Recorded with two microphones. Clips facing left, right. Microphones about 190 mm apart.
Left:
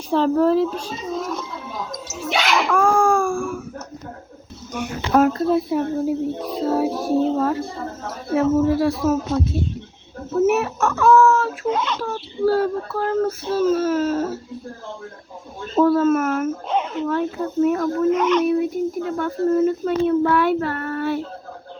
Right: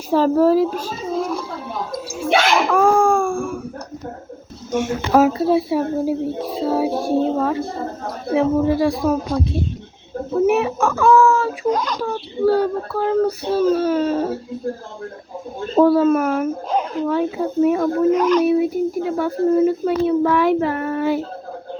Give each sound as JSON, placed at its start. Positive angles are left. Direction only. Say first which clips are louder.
{"t": 0.1, "sound": "speech", "louder": "right 2 dB", "side_deg": -5}
{"t": 2.6, "sound": "a sound", "louder": "right 1 dB", "side_deg": -5}
{"t": 4.7, "sound": "speech", "louder": "right 3 dB", "side_deg": -5}
{"t": 15.8, "sound": "speech", "louder": "right 2 dB", "side_deg": 0}
{"t": 20.6, "sound": "speech", "louder": "right 4 dB", "side_deg": -10}